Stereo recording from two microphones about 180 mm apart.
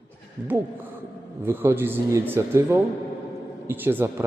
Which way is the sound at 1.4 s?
15° right (ahead or behind).